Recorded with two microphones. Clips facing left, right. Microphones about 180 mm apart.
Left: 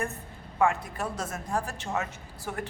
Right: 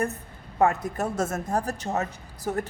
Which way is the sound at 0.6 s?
40° right (ahead or behind).